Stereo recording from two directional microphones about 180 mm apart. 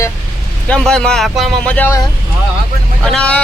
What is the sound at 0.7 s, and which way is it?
Speech, 5° left (ahead or behind).